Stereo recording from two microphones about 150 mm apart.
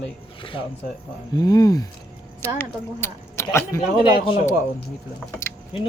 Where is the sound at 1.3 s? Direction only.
25° left (ahead or behind).